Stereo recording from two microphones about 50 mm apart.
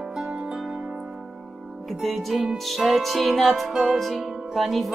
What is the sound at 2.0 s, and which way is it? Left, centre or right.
Music, centre.